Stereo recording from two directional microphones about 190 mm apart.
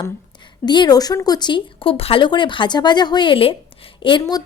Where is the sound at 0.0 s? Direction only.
25° left (ahead or behind).